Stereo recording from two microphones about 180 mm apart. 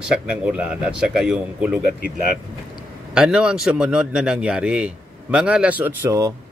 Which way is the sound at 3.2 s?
5° right (ahead or behind).